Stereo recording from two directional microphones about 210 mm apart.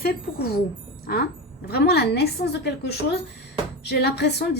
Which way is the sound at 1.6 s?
50° left (ahead or behind).